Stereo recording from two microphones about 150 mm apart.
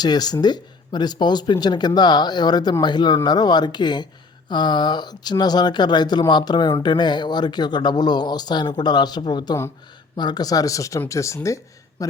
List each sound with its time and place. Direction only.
0.0 s speech: 25° left (ahead or behind)